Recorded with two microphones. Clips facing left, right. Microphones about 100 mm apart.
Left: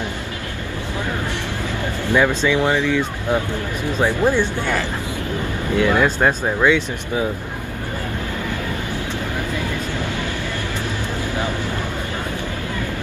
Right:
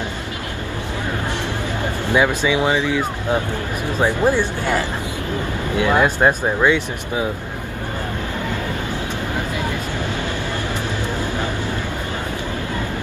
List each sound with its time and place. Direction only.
2.0 s speech: 15° right (ahead or behind)
4.0 s speech: 15° right (ahead or behind)